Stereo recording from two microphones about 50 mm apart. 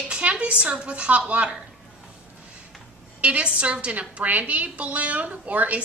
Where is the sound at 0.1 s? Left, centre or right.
Right.